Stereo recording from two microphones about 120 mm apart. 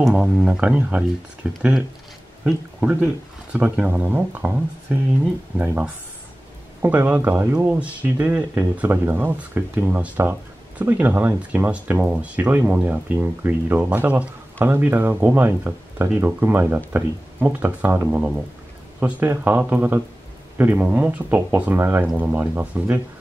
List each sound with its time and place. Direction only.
0.0 s speech: 5° right (ahead or behind)